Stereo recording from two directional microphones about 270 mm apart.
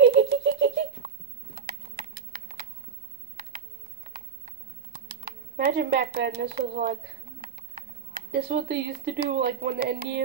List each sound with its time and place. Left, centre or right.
0.0 s baby laughter: right
1.0 s a sound: right
5.2 s speech: right
8.5 s speech: right